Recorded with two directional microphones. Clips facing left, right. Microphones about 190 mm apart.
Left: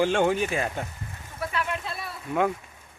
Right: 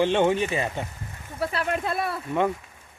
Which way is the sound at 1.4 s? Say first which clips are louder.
Right 4 dB; 35° right (ahead or behind).